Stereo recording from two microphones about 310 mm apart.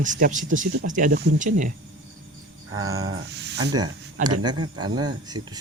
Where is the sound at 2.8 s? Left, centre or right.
Right.